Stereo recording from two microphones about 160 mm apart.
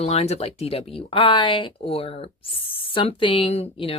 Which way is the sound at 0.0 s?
40° left (ahead or behind).